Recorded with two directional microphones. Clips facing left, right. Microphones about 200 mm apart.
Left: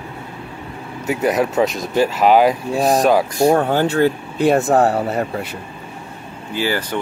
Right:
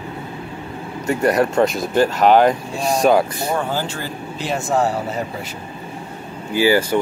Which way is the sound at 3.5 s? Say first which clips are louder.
Left 7 dB; 60° left (ahead or behind).